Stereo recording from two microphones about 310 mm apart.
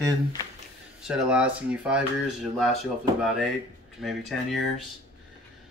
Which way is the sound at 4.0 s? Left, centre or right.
Centre.